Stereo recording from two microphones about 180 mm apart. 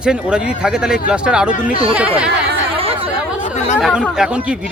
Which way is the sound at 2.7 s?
30° right (ahead or behind).